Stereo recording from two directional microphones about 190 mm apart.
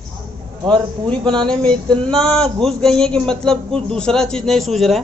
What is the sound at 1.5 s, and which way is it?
Speech, 5° left (ahead or behind).